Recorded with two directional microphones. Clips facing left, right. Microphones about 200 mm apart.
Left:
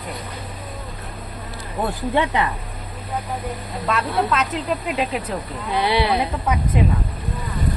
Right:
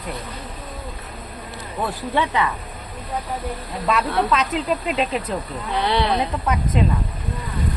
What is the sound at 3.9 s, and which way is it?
Speech, centre (ahead or behind).